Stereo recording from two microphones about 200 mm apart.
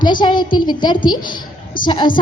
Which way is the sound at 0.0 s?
25° left (ahead or behind).